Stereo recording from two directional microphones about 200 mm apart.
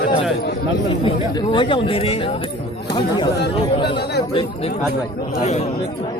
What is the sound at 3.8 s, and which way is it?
Speech, 55° left (ahead or behind).